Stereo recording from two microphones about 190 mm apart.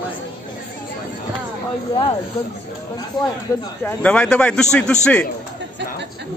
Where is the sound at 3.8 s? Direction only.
5° left (ahead or behind).